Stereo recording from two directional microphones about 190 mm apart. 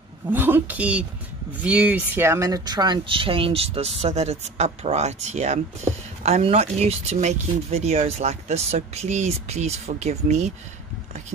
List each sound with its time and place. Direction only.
0.3 s speech: 10° right (ahead or behind); by 10.5 s 35° right (ahead or behind)